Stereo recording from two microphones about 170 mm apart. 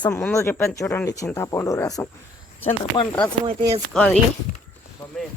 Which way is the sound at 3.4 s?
25° right (ahead or behind).